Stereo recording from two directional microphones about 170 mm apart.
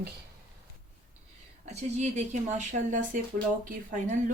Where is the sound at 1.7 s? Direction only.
45° right (ahead or behind).